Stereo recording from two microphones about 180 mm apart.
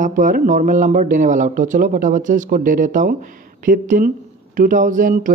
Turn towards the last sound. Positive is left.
turn(degrees=-45)  # may be behind; listen again after turning